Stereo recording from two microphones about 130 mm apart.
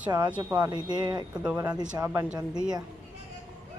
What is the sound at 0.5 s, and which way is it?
Speech, 30° right (ahead or behind).